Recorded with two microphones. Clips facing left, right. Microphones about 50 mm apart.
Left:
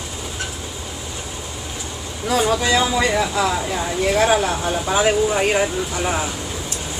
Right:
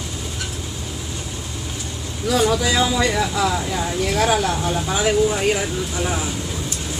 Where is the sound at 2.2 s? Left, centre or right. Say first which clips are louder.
Even; left.